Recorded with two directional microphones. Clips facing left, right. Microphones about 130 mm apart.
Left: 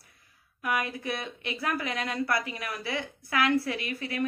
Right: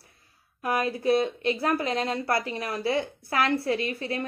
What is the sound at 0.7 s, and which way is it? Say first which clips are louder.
Speech: right 6 dB; 30° right (ahead or behind).